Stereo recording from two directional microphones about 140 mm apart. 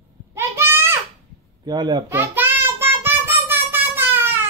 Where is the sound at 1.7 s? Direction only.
30° right (ahead or behind).